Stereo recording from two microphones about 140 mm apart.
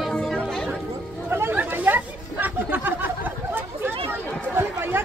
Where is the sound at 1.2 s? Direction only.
15° right (ahead or behind).